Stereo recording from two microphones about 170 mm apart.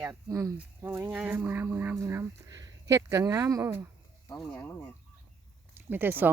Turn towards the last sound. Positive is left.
turn(degrees=-10)  # may be behind; listen again after turning